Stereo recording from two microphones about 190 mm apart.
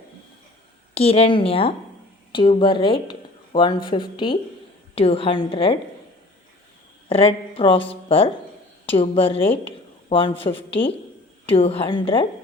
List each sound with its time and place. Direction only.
0.9 s a woman's voice: 30° left (ahead or behind)
7.1 s a woman's voice: 30° left (ahead or behind)